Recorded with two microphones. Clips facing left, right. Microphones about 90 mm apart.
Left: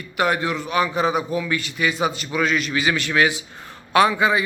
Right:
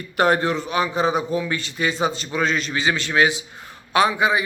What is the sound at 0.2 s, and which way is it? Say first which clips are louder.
A man's voice: right 3 dB; 30° right (ahead or behind).